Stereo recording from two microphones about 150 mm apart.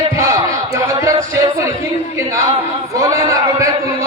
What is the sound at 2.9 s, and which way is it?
Music, 20° right (ahead or behind).